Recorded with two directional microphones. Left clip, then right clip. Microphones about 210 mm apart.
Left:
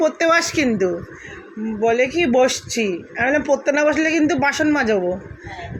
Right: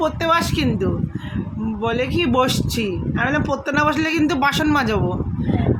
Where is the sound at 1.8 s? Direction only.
65° right (ahead or behind).